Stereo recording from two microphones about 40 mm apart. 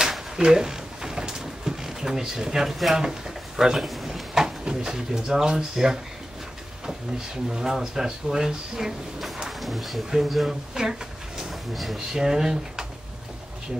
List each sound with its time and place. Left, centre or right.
0.4 s drawer open or close: centre
3.0 s speech: centre
3.8 s speech: centre
4.6 s speech: centre
7.4 s speech: centre
10.7 s a sound: centre
11.7 s speech: centre
12.2 s speech: centre